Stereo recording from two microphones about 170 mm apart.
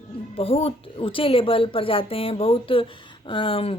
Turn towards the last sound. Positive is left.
turn(degrees=35)  # may be behind; listen again after turning